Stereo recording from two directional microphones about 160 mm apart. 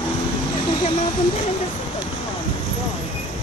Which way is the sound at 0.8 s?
40° left (ahead or behind).